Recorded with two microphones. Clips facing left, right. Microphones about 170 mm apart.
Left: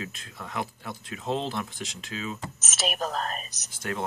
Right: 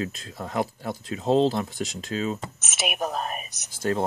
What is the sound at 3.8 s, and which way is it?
Speech, 35° right (ahead or behind).